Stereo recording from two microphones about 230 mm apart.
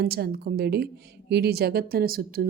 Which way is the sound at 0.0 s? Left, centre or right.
Right.